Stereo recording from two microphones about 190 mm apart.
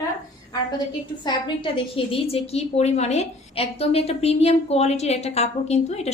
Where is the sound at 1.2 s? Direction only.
25° left (ahead or behind).